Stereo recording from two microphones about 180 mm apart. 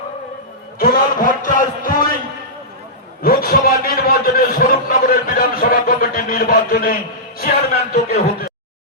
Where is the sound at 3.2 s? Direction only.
55° left (ahead or behind).